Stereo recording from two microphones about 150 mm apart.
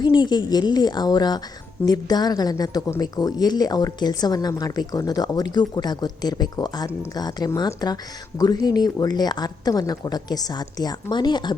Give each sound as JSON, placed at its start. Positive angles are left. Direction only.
{"t": 0.0, "sound": "speech", "side_deg": 30}